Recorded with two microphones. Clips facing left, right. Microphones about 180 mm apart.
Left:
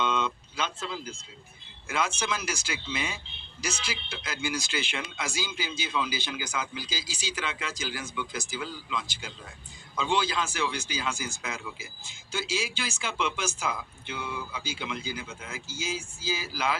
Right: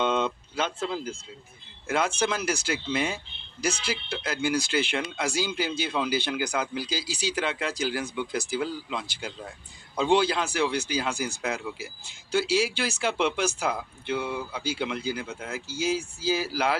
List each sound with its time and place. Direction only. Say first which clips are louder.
0.0 s speech: right 3 dB; 55° right (ahead or behind)